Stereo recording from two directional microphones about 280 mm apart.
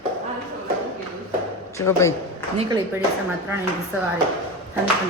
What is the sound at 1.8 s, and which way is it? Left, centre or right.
Speech, centre.